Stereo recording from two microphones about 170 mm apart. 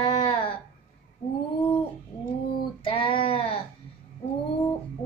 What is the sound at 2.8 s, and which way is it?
Speech, 30° left (ahead or behind).